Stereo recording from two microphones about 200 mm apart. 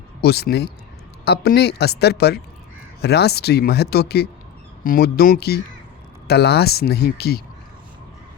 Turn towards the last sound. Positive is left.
turn(degrees=50)  # may be behind; listen again after turning